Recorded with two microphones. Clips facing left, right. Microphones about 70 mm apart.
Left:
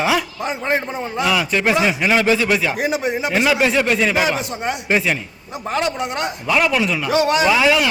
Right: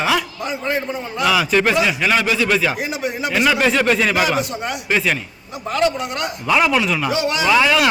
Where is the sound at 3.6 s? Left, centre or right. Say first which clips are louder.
Even; centre.